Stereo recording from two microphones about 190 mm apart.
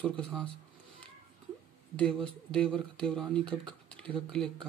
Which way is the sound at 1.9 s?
5° left (ahead or behind).